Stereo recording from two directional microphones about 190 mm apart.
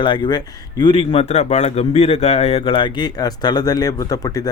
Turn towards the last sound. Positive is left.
turn(degrees=20)  # may be behind; listen again after turning